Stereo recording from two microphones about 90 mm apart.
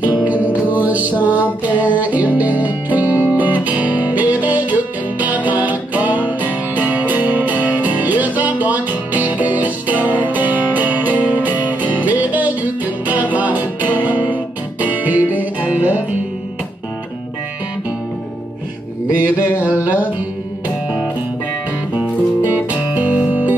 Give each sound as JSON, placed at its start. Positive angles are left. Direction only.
{"t": 0.0, "sound": "music", "side_deg": -15}
{"t": 19.1, "sound": "a sound", "side_deg": -20}
{"t": 22.5, "sound": "music", "side_deg": -20}